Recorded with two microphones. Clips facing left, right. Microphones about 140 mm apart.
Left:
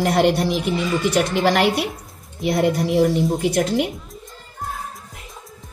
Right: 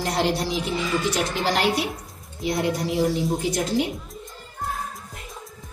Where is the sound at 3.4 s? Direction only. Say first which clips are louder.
Left 4 dB; 60° left (ahead or behind).